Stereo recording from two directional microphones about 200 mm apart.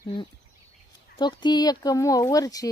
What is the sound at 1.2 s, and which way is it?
Speech, 20° left (ahead or behind).